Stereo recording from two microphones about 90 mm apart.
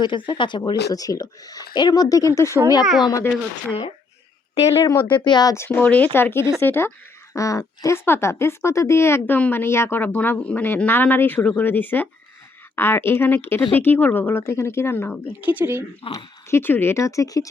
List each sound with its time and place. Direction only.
0.0 s speech: 65° left (ahead or behind); by 2.6 s 30° left (ahead or behind)
2.8 s speech: 5° right (ahead or behind)
5.0 s speech: 60° left (ahead or behind)
5.5 s a woman's voice: 25° left (ahead or behind)
7.3 s a woman's voice: 35° left (ahead or behind)
15.4 s speech: 20° right (ahead or behind)
16.1 s speech: 30° left (ahead or behind)